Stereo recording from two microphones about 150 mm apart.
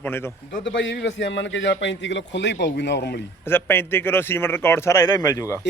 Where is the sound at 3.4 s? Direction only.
15° left (ahead or behind).